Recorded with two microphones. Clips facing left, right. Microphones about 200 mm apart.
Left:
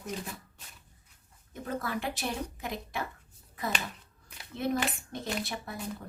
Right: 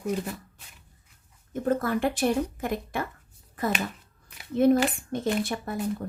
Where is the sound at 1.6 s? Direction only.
50° right (ahead or behind).